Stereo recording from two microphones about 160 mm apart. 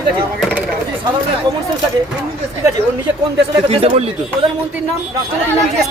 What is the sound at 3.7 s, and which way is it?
Speech, 40° right (ahead or behind).